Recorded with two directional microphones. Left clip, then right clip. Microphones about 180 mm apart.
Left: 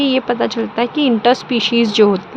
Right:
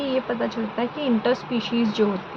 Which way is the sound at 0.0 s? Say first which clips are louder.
Left 8 dB; 65° left (ahead or behind).